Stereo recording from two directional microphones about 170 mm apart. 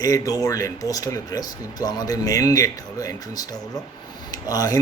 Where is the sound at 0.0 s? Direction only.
20° left (ahead or behind).